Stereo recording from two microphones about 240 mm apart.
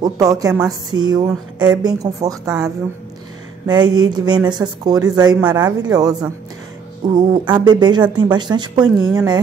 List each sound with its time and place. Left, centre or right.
0.0 s speech: centre